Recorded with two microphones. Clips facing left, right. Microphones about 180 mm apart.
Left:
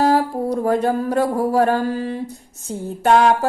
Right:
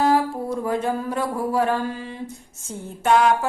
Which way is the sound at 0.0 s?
40° left (ahead or behind).